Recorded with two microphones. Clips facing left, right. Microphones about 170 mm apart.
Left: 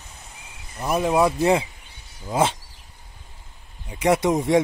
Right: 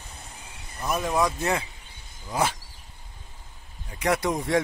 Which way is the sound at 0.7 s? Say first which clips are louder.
Left 5 dB; 30° left (ahead or behind).